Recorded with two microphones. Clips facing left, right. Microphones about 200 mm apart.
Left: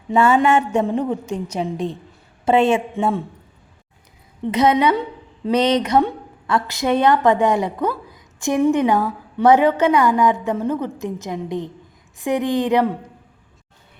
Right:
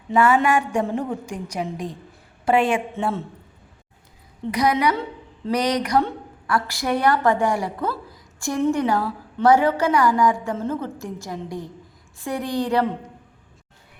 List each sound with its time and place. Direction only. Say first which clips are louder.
0.1 s a woman's voice: left 3 dB; 25° left (ahead or behind)
4.5 s a woman's voice: left 4 dB; 25° left (ahead or behind)